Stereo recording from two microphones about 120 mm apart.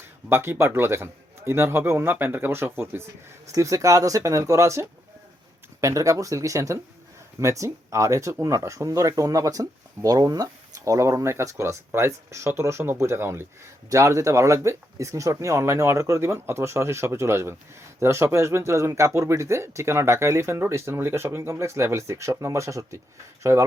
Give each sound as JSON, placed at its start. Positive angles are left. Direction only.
{"t": 0.3, "sound": "speech", "side_deg": -20}